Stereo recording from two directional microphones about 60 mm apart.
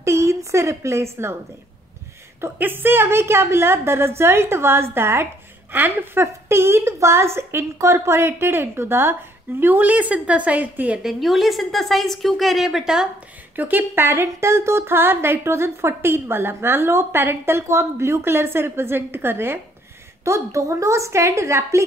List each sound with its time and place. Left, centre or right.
0.0 s a woman's voice: right
2.4 s a woman's voice: right
6.2 s a woman's voice: right
9.6 s a woman's voice: right
11.0 s a woman's voice: centre
13.6 s a woman's voice: right
20.2 s a woman's voice: right